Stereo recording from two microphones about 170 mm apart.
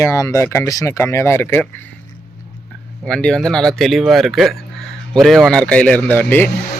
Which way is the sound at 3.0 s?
5° left (ahead or behind).